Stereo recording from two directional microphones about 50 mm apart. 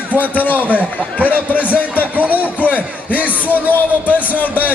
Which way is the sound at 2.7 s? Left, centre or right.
Left.